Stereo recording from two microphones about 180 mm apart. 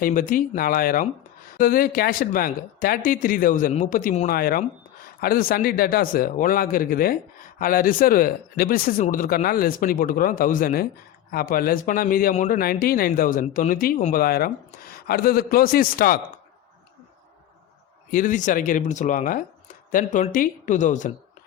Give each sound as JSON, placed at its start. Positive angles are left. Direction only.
{"t": 0.0, "sound": "speech", "side_deg": 50}
{"t": 18.1, "sound": "speech", "side_deg": 45}